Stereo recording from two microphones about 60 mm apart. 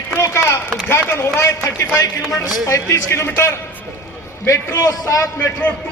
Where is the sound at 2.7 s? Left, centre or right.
Left.